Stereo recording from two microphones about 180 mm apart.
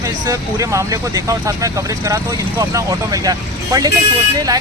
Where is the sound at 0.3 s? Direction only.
15° right (ahead or behind).